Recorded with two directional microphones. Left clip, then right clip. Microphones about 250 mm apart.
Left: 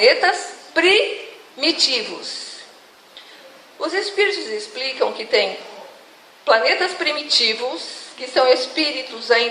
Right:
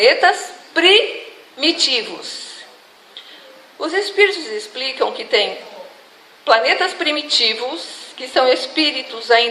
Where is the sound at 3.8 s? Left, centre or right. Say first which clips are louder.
Right 4 dB; right.